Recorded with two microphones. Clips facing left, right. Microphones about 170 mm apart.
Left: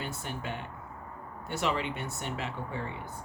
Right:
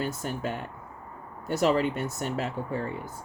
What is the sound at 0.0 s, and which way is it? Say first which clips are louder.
Speech: right 7 dB; 40° right (ahead or behind).